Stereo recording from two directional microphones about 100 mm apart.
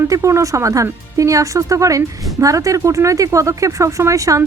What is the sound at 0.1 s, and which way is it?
Speech, 30° right (ahead or behind).